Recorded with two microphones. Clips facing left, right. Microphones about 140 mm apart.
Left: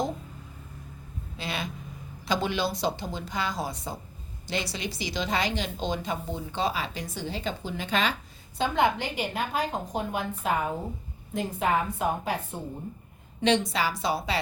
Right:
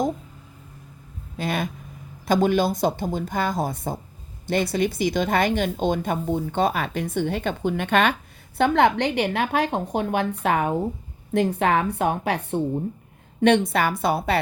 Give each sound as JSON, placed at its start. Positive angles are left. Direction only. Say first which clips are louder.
{"t": 1.4, "sound": "a woman's voice", "louder": "right 8 dB", "side_deg": -50}
{"t": 13.4, "sound": "a woman's voice", "louder": "right 6 dB", "side_deg": -55}